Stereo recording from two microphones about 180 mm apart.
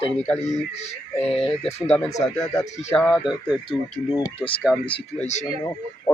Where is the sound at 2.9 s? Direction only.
5° left (ahead or behind).